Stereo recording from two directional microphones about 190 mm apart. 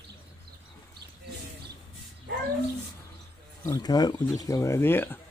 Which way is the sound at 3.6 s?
20° left (ahead or behind).